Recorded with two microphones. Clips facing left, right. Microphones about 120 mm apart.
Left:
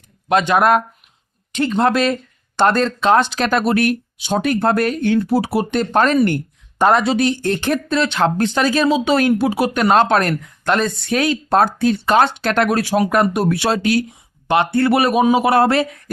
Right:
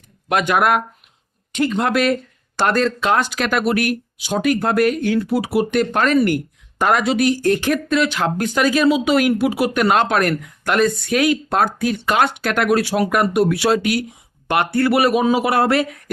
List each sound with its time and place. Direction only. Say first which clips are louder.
0.3 s speech: left 3 dB; 25° left (ahead or behind)